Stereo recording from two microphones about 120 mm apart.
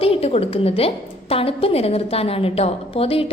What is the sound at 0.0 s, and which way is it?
A woman's voice, 55° left (ahead or behind).